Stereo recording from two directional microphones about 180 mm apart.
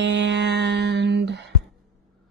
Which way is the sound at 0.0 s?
75° right (ahead or behind).